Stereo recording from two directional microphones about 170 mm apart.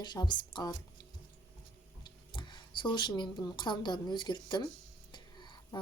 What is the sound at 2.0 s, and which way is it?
Speech, 25° left (ahead or behind).